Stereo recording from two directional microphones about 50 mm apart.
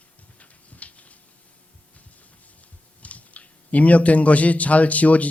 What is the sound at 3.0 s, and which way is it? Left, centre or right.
Speech, left.